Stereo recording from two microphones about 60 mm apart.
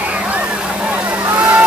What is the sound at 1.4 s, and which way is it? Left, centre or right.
Vehicle, right.